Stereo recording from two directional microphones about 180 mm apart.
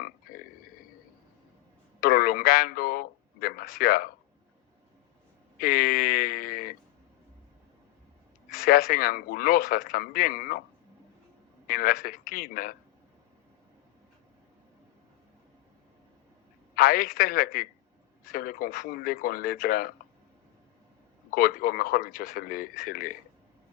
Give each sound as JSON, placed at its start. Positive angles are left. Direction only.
{"t": 2.0, "sound": "a sound", "side_deg": 55}
{"t": 5.5, "sound": "a sound", "side_deg": 55}
{"t": 8.5, "sound": "speech", "side_deg": 55}
{"t": 11.7, "sound": "speech", "side_deg": 55}
{"t": 16.7, "sound": "speech", "side_deg": 55}
{"t": 21.2, "sound": "speech", "side_deg": 55}